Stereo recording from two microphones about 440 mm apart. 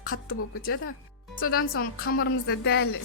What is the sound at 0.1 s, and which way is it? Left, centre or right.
A woman's voice, left.